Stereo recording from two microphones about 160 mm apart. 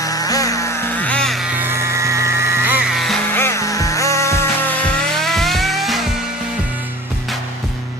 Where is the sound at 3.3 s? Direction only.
15° left (ahead or behind).